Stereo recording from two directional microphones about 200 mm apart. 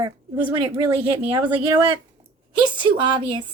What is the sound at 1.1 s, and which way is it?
A woman's voice, 25° right (ahead or behind).